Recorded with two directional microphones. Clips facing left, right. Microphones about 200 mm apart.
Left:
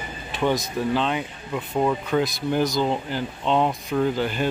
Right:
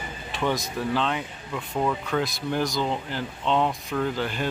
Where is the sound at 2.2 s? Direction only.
Centre (ahead or behind).